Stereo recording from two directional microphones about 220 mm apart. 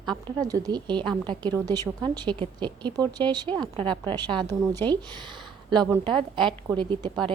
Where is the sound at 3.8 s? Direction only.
5° left (ahead or behind).